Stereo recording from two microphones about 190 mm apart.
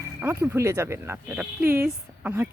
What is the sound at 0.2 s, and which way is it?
Speech, 10° right (ahead or behind).